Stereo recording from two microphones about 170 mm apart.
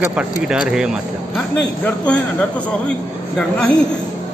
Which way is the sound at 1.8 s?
5° left (ahead or behind).